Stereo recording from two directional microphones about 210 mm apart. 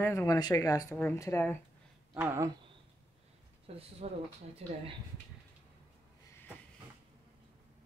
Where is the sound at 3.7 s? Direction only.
30° right (ahead or behind).